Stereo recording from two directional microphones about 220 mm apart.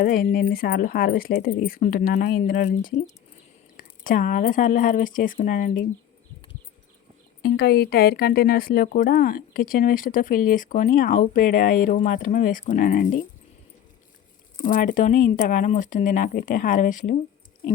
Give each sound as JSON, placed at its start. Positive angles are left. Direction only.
{"t": 0.0, "sound": "speech", "side_deg": 40}
{"t": 7.4, "sound": "speech", "side_deg": 45}
{"t": 14.6, "sound": "speech", "side_deg": 35}